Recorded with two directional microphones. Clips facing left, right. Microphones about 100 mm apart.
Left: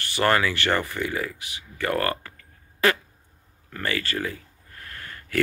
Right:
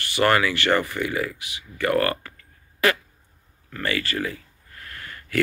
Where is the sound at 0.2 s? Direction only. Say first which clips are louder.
Right 2 dB; 30° left (ahead or behind).